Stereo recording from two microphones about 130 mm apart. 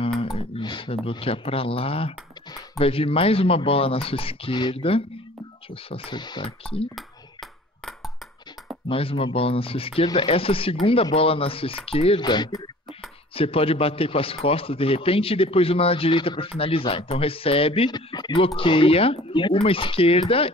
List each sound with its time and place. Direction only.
0.2 s a man's voice: 45° left (ahead or behind)
7.0 s a sound: centre (ahead or behind)
8.8 s a man's voice: 45° left (ahead or behind)
12.2 s speech: 35° left (ahead or behind)
13.3 s a man's voice: 45° left (ahead or behind)